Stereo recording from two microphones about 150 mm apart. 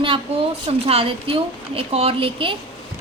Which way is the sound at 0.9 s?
40° right (ahead or behind).